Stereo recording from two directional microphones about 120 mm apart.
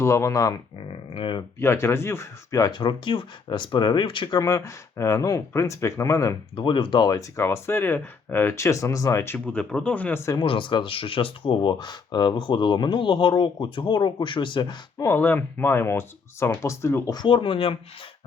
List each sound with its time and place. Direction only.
0.0 s speech: 25° left (ahead or behind)
0.9 s a sound: 50° left (ahead or behind)
1.5 s speech: 20° left (ahead or behind)
6.6 s speech: 40° left (ahead or behind); by 10.3 s 20° left (ahead or behind)
10.3 s speech: 45° left (ahead or behind)
15.0 s speech: 20° left (ahead or behind)
17.1 s speech: 40° left (ahead or behind)